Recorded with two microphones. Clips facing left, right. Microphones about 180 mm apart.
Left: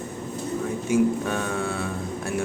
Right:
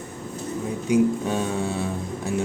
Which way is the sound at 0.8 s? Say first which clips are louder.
Right 2 dB; 15° right (ahead or behind).